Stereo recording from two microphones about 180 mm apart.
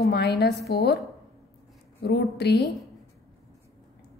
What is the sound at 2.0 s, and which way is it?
Speech, 65° left (ahead or behind).